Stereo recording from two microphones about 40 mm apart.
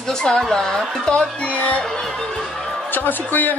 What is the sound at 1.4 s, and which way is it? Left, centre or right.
Music, left.